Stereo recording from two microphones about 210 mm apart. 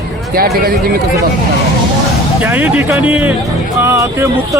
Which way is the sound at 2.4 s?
10° right (ahead or behind).